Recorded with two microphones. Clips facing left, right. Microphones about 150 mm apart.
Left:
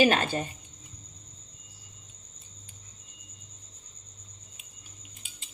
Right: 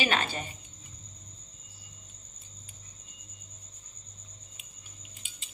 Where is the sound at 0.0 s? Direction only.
45° left (ahead or behind).